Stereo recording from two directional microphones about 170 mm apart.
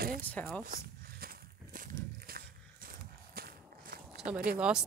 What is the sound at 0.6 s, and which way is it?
Walk, 60° right (ahead or behind).